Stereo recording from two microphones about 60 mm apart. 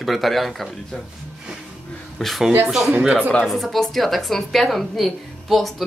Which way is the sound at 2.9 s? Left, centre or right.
Centre.